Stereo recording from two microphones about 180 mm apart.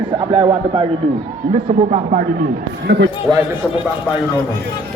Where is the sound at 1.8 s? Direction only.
35° right (ahead or behind).